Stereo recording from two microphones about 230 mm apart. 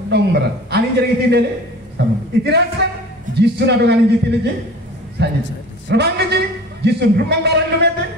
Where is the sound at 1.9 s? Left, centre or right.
Right.